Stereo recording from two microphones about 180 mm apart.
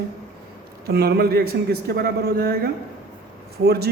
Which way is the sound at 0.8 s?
65° right (ahead or behind).